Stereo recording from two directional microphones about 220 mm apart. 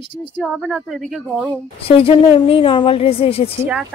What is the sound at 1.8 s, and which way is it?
A woman's voice, 25° left (ahead or behind).